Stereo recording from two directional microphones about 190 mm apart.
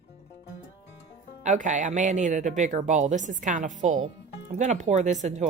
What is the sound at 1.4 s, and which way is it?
Speech, 40° right (ahead or behind).